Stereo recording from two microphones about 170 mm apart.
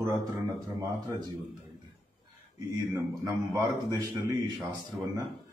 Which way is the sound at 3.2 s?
20° right (ahead or behind).